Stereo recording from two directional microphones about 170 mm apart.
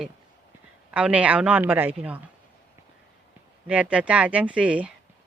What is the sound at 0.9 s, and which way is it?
Speech, 10° right (ahead or behind).